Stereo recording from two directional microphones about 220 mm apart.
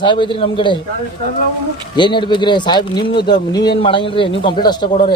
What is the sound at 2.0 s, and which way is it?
Speech, 20° left (ahead or behind).